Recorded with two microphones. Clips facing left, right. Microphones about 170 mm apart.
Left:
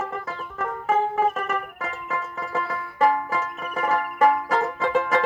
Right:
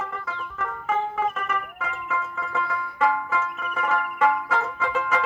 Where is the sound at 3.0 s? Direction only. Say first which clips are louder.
Left 3 dB; 40° left (ahead or behind).